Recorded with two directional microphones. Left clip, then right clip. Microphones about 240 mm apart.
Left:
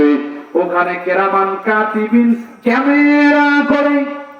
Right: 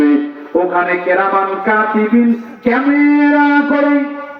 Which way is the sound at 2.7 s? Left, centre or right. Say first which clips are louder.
Left 1 dB; left.